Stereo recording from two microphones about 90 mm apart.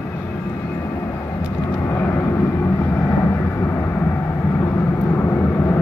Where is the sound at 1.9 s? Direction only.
25° left (ahead or behind).